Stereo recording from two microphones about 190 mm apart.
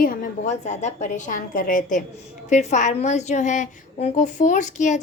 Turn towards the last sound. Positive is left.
turn(degrees=40)  # may be behind; listen again after turning